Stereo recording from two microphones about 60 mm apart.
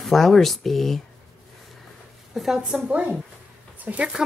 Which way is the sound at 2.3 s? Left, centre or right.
Centre.